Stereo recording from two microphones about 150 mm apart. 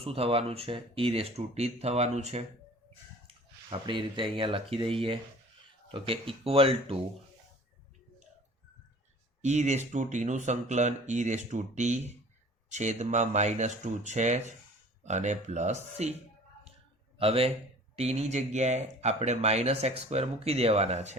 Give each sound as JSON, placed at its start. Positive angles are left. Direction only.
{"t": 0.0, "sound": "speech", "side_deg": -40}
{"t": 3.2, "sound": "speech", "side_deg": -35}
{"t": 9.4, "sound": "speech", "side_deg": -50}
{"t": 17.2, "sound": "speech", "side_deg": -40}